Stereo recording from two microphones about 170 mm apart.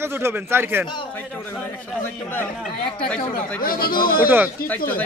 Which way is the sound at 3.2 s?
60° left (ahead or behind).